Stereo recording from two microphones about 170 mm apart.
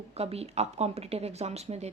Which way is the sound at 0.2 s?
35° right (ahead or behind).